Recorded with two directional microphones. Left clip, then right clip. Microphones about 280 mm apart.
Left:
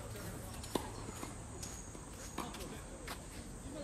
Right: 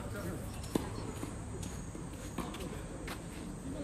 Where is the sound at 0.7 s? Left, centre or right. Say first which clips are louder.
Right 3 dB; left.